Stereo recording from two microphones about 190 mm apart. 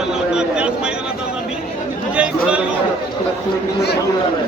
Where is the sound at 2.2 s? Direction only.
5° right (ahead or behind).